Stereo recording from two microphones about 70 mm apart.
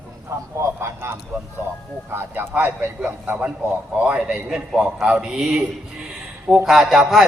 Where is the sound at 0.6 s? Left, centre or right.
Right.